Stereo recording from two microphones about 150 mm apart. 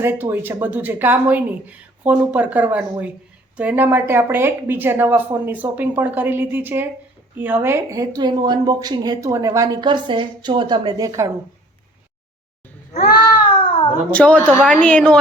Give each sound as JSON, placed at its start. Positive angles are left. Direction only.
{"t": 0.0, "sound": "speech", "side_deg": -15}
{"t": 13.0, "sound": "cat", "side_deg": 75}
{"t": 14.1, "sound": "a woman's voice", "side_deg": 10}